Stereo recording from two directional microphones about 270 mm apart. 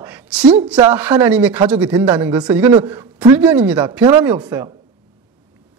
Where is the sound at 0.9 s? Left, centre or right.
Centre.